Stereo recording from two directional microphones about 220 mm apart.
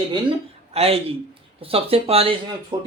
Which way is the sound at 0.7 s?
25° right (ahead or behind).